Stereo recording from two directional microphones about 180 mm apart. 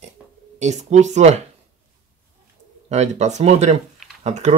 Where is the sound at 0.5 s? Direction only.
40° right (ahead or behind).